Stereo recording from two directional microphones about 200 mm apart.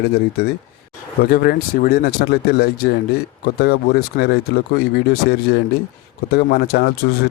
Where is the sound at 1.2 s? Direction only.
50° left (ahead or behind).